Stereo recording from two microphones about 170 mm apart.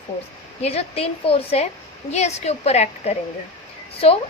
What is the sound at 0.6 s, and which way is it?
A woman's voice, 35° left (ahead or behind).